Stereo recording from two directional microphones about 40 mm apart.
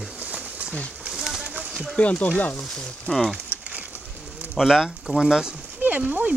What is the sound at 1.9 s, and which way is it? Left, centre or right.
Speech, left.